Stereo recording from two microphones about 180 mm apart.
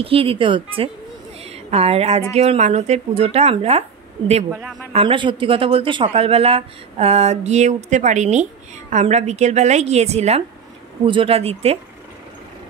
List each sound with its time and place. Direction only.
0.0 s speech: 30° right (ahead or behind)
1.4 s a sound: 35° right (ahead or behind)
2.3 s speech: 35° right (ahead or behind)
4.9 s speech: 25° right (ahead or behind)